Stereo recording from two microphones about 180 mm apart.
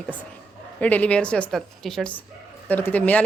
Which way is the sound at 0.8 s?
10° left (ahead or behind).